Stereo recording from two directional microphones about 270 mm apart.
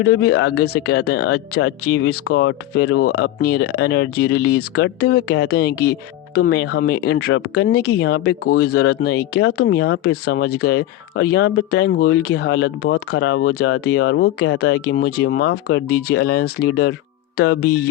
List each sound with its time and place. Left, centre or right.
0.2 s speech: left
0.4 s speech: left
0.9 s speech: left
3.6 s speech: left
3.8 s speech: left
5.0 s speech: left